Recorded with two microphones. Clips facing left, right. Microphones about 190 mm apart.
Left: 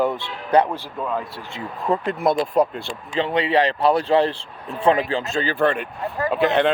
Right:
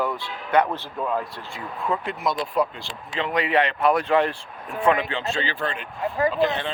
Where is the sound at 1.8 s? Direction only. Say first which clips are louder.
Left 5 dB; 40° left (ahead or behind).